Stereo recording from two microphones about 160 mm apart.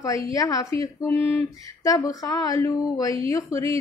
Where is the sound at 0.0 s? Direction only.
20° left (ahead or behind).